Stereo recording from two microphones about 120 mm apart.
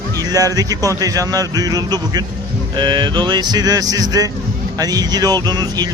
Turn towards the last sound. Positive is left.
turn(degrees=-35)  # may be behind; listen again after turning